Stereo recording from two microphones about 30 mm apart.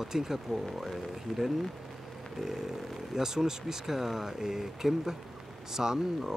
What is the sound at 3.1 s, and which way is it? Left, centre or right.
Speech, centre.